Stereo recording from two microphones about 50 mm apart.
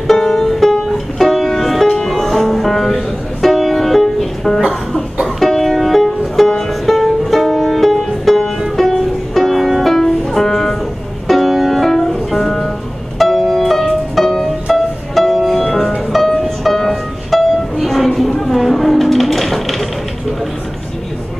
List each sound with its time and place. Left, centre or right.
0.1 s music: centre